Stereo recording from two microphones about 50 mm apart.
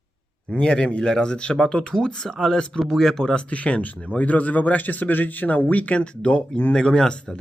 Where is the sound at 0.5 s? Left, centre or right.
Centre.